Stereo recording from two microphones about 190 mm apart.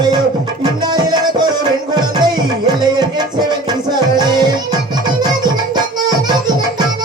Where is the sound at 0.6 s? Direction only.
20° right (ahead or behind).